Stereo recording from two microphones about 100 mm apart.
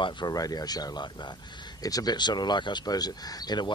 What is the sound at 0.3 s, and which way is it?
Speech, 40° left (ahead or behind).